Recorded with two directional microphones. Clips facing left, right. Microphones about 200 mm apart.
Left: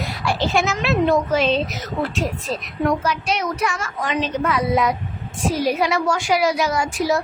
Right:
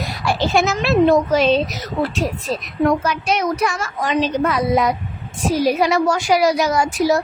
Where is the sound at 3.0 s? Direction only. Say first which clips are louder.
Right 3 dB; 50° right (ahead or behind).